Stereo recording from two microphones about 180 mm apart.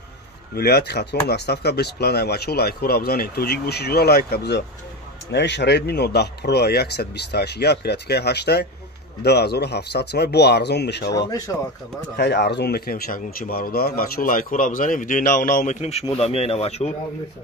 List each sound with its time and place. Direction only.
0.6 s speech: 65° left (ahead or behind)
11.1 s speech: 20° left (ahead or behind)
12.2 s speech: 65° left (ahead or behind); by 16.9 s 35° left (ahead or behind)